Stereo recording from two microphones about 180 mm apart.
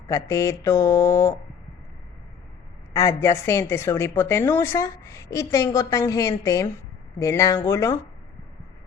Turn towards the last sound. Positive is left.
turn(degrees=15)  # may be behind; listen again after turning